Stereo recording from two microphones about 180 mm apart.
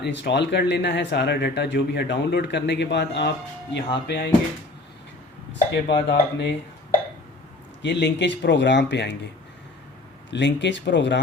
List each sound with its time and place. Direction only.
0.0 s speech: 75° left (ahead or behind)
5.7 s speech: 65° left (ahead or behind)
7.8 s speech: 75° left (ahead or behind)
10.3 s speech: 80° left